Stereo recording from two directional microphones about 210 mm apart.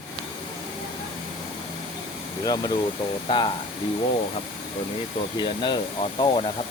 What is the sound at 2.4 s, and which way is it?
Speech, 15° left (ahead or behind).